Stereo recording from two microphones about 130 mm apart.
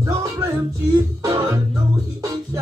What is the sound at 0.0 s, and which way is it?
Music, 25° right (ahead or behind).